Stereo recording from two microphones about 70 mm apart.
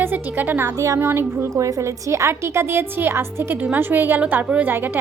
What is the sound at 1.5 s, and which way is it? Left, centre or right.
A woman's voice, right.